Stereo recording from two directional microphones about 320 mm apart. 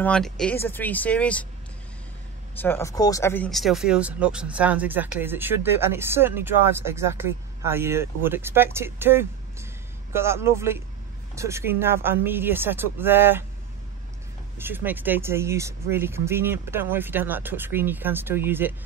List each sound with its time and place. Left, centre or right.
0.0 s speech: centre
2.6 s speech: centre
14.6 s speech: centre